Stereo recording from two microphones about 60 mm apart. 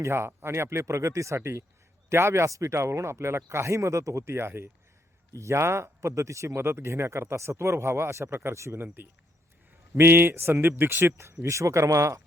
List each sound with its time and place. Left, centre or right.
0.0 s speech: right
4.4 s speech: right
5.3 s speech: right
6.6 s speech: right
9.9 s speech: right
11.0 s speech: right